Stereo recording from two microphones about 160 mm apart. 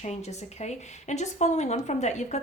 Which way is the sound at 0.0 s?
45° left (ahead or behind).